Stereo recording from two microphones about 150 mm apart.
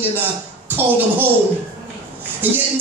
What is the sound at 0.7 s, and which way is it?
Music, 15° right (ahead or behind).